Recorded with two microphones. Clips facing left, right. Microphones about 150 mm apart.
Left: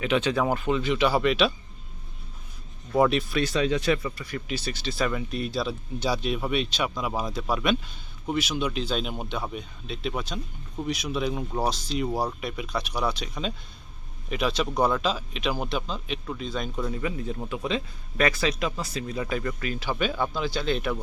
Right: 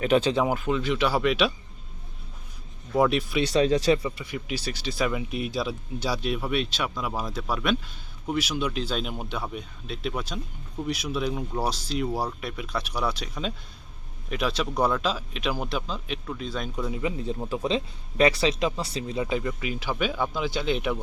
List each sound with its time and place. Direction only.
0.0 s speech: 40° right (ahead or behind)
0.4 s speech: 5° right (ahead or behind)
2.9 s speech: centre (ahead or behind)
3.4 s speech: 35° right (ahead or behind)
4.0 s speech: 15° right (ahead or behind)
16.9 s speech: 20° right (ahead or behind)